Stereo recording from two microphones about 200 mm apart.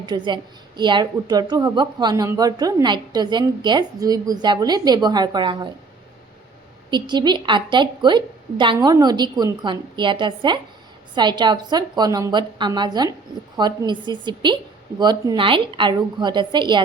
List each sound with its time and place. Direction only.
0.0 s speech: 20° right (ahead or behind)
6.9 s speech: 20° right (ahead or behind)